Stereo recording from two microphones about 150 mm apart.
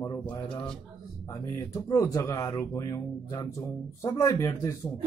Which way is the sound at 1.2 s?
25° left (ahead or behind).